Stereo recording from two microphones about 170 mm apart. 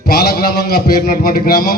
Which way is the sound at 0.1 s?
65° left (ahead or behind).